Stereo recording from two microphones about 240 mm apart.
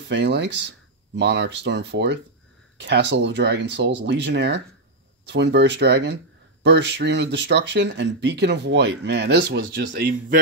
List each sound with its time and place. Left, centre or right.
0.1 s speech: right